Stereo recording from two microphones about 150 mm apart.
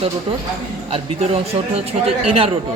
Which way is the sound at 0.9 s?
40° right (ahead or behind).